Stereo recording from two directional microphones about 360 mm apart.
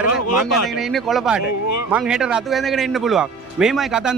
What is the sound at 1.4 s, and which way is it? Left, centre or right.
Speech, left.